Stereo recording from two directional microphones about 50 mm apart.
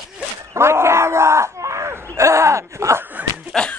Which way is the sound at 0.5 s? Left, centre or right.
Right.